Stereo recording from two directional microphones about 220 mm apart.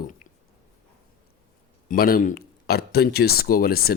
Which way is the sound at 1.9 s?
40° left (ahead or behind).